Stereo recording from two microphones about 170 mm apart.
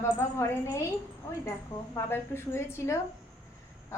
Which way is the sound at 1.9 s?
15° left (ahead or behind).